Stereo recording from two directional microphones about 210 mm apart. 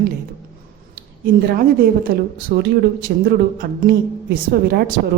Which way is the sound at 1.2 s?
45° right (ahead or behind).